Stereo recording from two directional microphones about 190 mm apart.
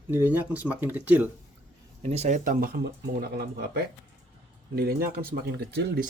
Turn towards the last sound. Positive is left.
turn(degrees=-60)  # may be behind; listen again after turning